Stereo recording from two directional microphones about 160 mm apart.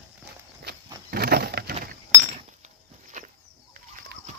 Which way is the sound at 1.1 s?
75° right (ahead or behind).